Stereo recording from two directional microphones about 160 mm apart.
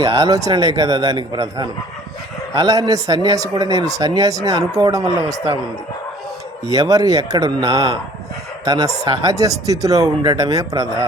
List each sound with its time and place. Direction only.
0.0 s speech: 20° right (ahead or behind)
6.7 s speech: 20° right (ahead or behind)